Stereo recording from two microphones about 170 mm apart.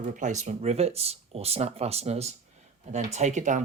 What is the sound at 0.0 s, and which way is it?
Speech, 45° right (ahead or behind).